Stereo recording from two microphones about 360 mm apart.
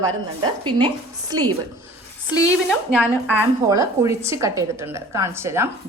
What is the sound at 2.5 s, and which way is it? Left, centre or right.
A woman's voice, centre.